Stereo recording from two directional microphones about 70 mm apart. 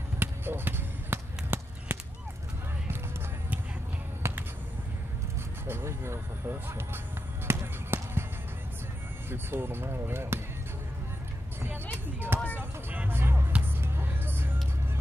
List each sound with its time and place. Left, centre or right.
0.2 s basketball bounce: right
4.2 s basketball bounce: right
5.7 s speech: right
7.4 s basketball bounce: right
9.3 s speech: right
11.6 s vehicle: right
13.7 s music: right